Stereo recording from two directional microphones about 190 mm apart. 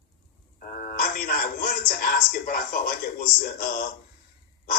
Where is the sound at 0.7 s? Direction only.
45° left (ahead or behind).